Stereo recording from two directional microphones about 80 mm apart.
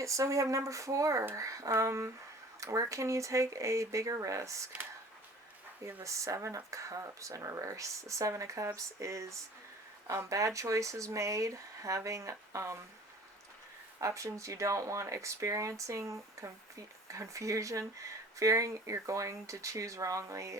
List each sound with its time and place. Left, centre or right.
0.0 s speech: right
5.8 s speech: right
14.0 s speech: right